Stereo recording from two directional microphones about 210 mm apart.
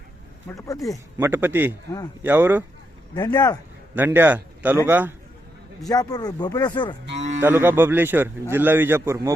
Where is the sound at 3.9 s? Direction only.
10° right (ahead or behind).